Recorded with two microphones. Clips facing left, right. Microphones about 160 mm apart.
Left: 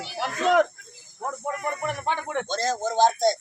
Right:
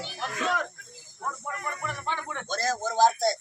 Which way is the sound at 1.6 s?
60° left (ahead or behind).